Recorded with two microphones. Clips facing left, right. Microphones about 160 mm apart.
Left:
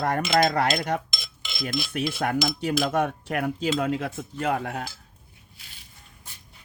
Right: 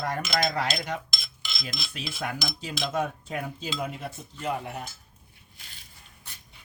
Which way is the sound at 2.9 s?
65° left (ahead or behind).